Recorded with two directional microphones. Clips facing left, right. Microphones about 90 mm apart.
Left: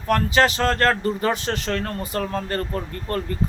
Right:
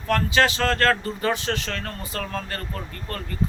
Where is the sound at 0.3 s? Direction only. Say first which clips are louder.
Left 1 dB; 20° left (ahead or behind).